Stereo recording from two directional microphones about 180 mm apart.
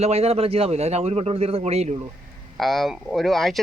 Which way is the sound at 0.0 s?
35° right (ahead or behind).